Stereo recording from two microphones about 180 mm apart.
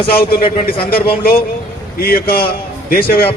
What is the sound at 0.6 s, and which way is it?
A man's voice, 60° left (ahead or behind).